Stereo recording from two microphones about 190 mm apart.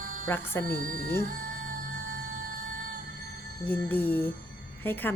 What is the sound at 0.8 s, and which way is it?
Speech, 45° right (ahead or behind).